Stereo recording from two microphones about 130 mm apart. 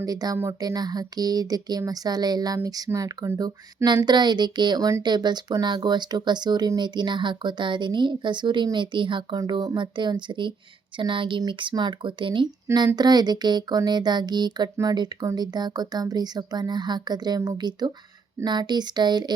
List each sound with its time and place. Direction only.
0.0 s speech: 30° right (ahead or behind)